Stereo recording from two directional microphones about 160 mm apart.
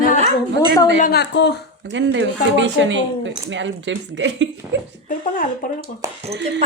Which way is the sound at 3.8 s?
90° right.